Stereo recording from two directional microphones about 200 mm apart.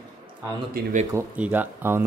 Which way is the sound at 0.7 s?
40° right (ahead or behind).